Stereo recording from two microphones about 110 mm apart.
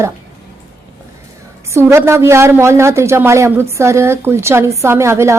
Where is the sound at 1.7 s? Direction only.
25° right (ahead or behind).